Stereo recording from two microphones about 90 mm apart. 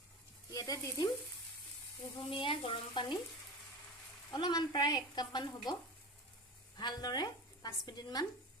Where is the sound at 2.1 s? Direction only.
70° left (ahead or behind).